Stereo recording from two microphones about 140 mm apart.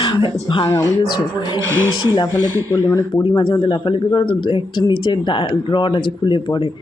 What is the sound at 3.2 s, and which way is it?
Speech, 35° left (ahead or behind).